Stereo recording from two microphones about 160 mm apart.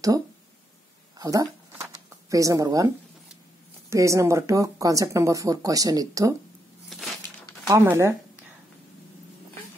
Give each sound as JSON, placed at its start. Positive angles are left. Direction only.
{"t": 1.1, "sound": "a sound", "side_deg": -25}
{"t": 3.9, "sound": "speech", "side_deg": -20}
{"t": 6.9, "sound": "crushing", "side_deg": 0}
{"t": 7.6, "sound": "speech", "side_deg": -15}